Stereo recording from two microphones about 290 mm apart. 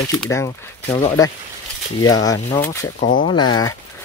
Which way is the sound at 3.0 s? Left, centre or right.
Left.